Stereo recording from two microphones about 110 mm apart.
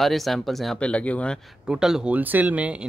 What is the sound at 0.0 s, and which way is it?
Speech, centre (ahead or behind).